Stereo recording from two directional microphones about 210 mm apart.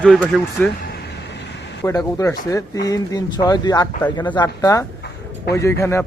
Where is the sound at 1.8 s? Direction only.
15° left (ahead or behind).